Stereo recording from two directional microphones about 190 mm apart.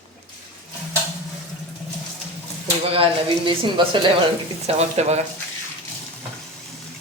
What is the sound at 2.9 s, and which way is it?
Speech, 30° right (ahead or behind).